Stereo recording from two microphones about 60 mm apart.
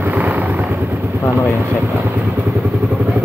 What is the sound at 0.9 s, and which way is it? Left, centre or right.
Vehicle, right.